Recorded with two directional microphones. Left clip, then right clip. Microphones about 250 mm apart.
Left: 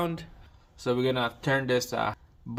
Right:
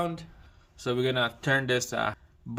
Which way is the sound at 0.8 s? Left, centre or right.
Centre.